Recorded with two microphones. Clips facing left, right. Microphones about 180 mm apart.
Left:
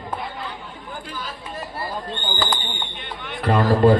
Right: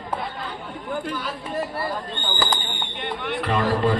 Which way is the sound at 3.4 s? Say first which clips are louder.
Left 6 dB; 35° left (ahead or behind).